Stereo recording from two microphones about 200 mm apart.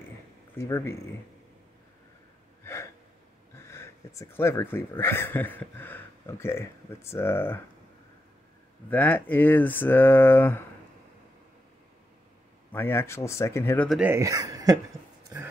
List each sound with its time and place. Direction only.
0.6 s speech: 15° left (ahead or behind)
2.6 s gasp: 15° left (ahead or behind)
3.5 s speech: 15° left (ahead or behind)
8.9 s speech: 10° left (ahead or behind)
12.7 s speech: 10° left (ahead or behind)
13.8 s speech: 5° right (ahead or behind)